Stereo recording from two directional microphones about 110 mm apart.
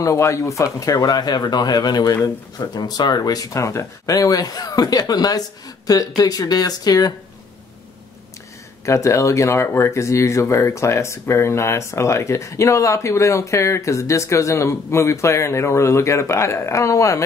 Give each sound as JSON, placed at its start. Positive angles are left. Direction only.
{"t": 0.0, "sound": "speech", "side_deg": 30}
{"t": 8.8, "sound": "speech", "side_deg": 25}